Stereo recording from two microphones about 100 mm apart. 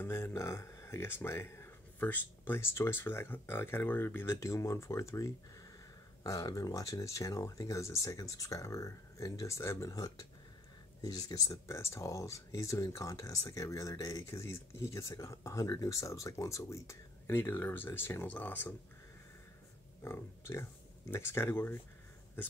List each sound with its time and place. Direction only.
0.0 s speech: 25° left (ahead or behind)
20.0 s speech: 25° left (ahead or behind)